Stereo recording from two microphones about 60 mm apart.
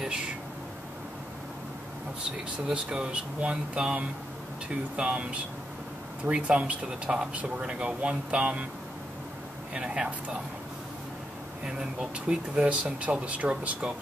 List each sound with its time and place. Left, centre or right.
2.7 s speech: centre
9.8 s speech: centre
11.6 s speech: centre